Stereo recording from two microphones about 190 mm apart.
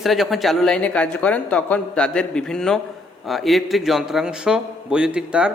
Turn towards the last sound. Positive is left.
turn(degrees=-5)  # may be behind; listen again after turning